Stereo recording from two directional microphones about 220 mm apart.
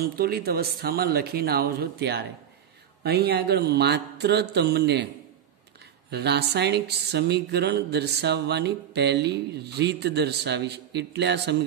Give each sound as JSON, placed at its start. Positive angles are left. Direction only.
{"t": 0.2, "sound": "speech", "side_deg": -45}
{"t": 6.0, "sound": "speech", "side_deg": -50}